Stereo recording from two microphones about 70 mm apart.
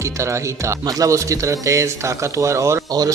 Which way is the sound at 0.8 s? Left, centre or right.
Right.